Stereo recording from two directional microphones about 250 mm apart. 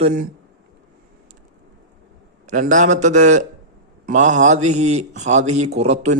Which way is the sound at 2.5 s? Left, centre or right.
Right.